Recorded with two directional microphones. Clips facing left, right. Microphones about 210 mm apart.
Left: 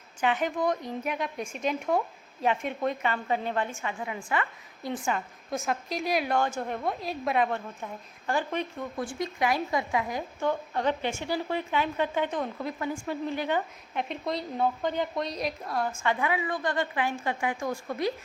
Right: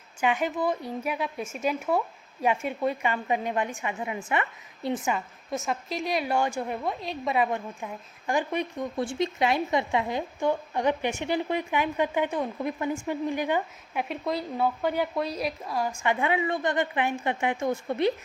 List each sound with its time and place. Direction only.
0.2 s a woman's voice: 10° right (ahead or behind)
5.1 s a woman's voice: centre (ahead or behind)
6.3 s a woman's voice: 10° right (ahead or behind)
7.4 s a woman's voice: 15° right (ahead or behind)
9.0 s a woman's voice: 25° right (ahead or behind)
10.4 s a woman's voice: 15° right (ahead or behind)